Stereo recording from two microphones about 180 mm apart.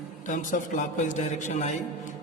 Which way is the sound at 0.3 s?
45° left (ahead or behind).